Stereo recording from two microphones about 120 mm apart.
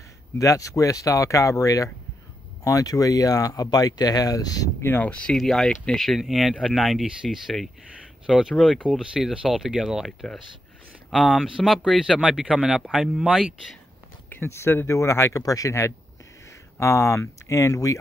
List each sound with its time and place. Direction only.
0.4 s speech: 25° left (ahead or behind)
4.8 s speech: 15° left (ahead or behind)
5.2 s speech: 5° left (ahead or behind)
14.3 s speech: 20° left (ahead or behind)